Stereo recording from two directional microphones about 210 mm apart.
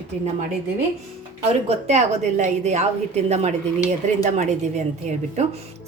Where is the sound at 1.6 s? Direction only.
35° right (ahead or behind).